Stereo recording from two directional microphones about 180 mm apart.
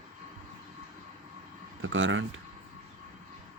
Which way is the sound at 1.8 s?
90° right.